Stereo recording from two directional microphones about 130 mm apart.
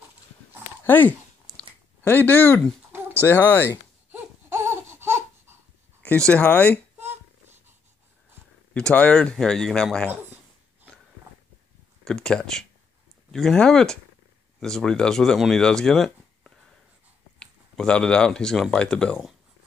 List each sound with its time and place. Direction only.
0.8 s speech: 15° left (ahead or behind)
2.9 s a sound: 15° right (ahead or behind)
3.3 s speech: 15° left (ahead or behind)
4.1 s a sound: 20° right (ahead or behind)
6.0 s speech: 10° left (ahead or behind)
8.7 s speech: 10° left (ahead or behind)
12.0 s speech: 5° left (ahead or behind)